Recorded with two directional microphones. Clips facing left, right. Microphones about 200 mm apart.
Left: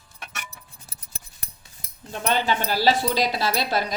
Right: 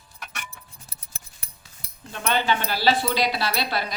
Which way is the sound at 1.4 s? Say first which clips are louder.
Even; 40° left (ahead or behind).